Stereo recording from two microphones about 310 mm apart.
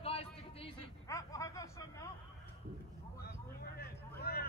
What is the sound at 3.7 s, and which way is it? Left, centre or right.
Vehicle, left.